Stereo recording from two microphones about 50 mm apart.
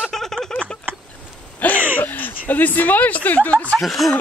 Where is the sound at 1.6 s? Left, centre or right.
Left.